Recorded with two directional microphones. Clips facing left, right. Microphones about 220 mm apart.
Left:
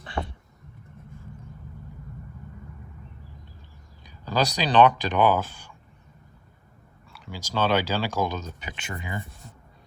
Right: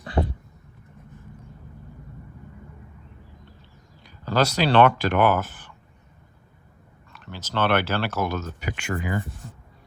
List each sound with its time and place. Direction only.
0.2 s a sound: 25° right (ahead or behind)
4.0 s speech: 15° left (ahead or behind)
7.1 s speech: 10° left (ahead or behind)